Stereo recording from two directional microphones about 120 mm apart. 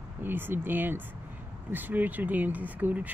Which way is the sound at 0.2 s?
15° right (ahead or behind).